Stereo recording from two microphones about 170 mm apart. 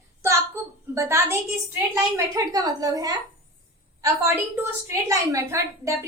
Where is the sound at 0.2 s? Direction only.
15° right (ahead or behind).